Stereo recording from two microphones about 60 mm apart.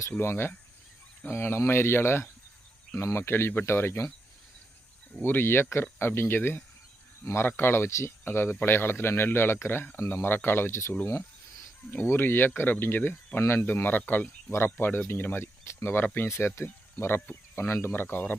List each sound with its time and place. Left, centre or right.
0.2 s speech: left
5.2 s speech: left